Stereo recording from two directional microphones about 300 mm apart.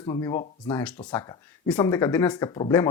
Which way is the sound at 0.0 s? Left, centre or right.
Centre.